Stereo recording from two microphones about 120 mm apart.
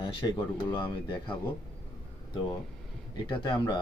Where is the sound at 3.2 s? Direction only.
40° left (ahead or behind).